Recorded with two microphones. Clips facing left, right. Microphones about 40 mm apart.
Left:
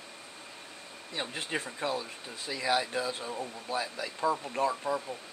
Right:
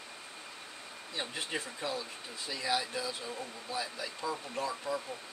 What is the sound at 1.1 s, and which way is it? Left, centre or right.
Speech, left.